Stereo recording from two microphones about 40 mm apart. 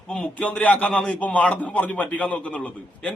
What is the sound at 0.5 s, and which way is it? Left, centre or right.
A man's voice, left.